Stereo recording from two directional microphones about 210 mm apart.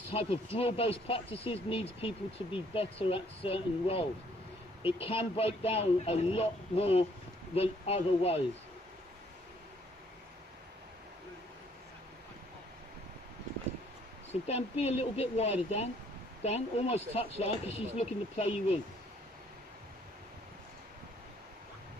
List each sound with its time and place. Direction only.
0.1 s speech: 25° left (ahead or behind)
14.3 s speech: 30° left (ahead or behind)